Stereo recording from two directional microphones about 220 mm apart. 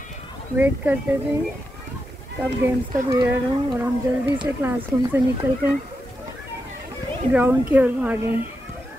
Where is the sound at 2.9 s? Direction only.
15° right (ahead or behind).